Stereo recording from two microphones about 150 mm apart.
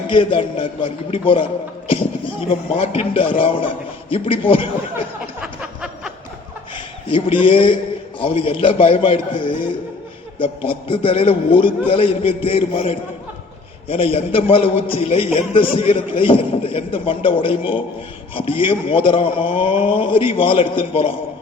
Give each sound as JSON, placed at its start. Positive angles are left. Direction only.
{"t": 0.1, "sound": "a man's voice", "side_deg": 35}
{"t": 2.5, "sound": "a man's voice", "side_deg": 40}
{"t": 6.7, "sound": "a man's voice", "side_deg": 35}